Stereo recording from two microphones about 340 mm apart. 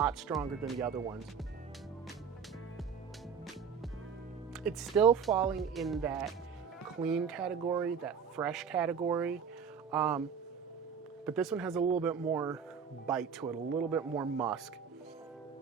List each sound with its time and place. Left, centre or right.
0.0 s speech: centre
4.6 s speech: centre
11.3 s speech: centre